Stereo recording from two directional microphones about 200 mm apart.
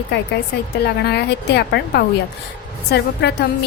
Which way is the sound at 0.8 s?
55° left (ahead or behind).